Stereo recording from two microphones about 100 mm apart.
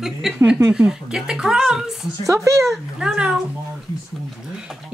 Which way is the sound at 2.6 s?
Centre (ahead or behind).